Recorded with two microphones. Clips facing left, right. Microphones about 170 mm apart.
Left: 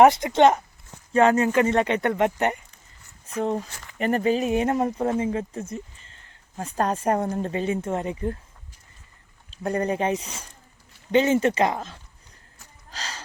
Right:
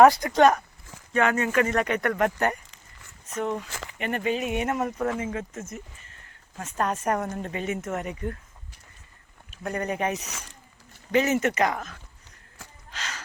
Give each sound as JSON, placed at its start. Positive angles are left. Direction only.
{"t": 0.0, "sound": "speech", "side_deg": 25}
{"t": 9.5, "sound": "speech", "side_deg": 30}
{"t": 12.9, "sound": "a sound", "side_deg": 35}